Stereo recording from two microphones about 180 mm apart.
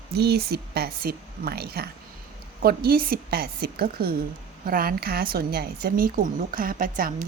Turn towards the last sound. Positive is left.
turn(degrees=-50)  # may be behind; listen again after turning